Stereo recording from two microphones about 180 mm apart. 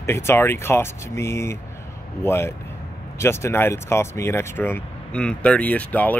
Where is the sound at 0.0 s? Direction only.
15° left (ahead or behind).